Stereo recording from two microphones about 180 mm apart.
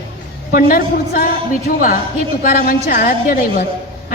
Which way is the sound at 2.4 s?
55° left (ahead or behind).